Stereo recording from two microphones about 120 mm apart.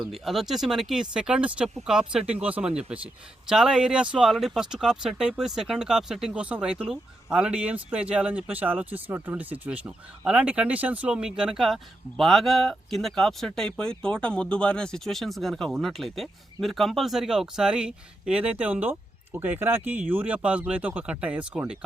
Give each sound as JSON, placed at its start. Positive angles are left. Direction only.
{"t": 0.1, "sound": "speech", "side_deg": 0}